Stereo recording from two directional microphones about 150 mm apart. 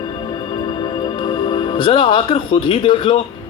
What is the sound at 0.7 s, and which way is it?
A woman's voice, 35° left (ahead or behind).